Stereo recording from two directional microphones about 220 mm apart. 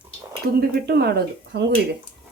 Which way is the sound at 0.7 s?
45° right (ahead or behind).